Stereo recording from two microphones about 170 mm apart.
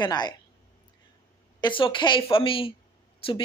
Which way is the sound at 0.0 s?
25° left (ahead or behind).